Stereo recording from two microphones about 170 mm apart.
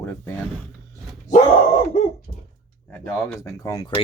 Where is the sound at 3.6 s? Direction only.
20° left (ahead or behind).